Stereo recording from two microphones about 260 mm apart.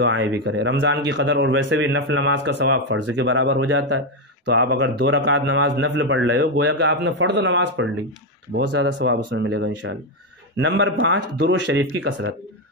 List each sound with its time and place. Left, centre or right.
0.0 s speech: right